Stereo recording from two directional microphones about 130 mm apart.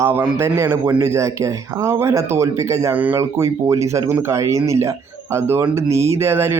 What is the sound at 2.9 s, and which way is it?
Speech, 10° right (ahead or behind).